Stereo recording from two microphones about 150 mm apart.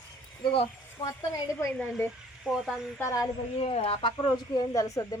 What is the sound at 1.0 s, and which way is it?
Speech, 25° left (ahead or behind).